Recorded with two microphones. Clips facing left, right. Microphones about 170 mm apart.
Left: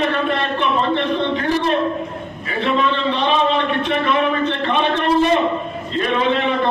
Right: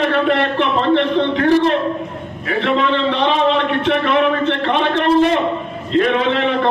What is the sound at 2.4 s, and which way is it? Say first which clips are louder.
A man's voice: right 2 dB; 75° right (ahead or behind).